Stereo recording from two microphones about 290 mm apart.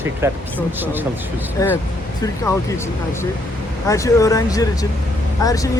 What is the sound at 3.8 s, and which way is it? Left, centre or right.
Speech, centre.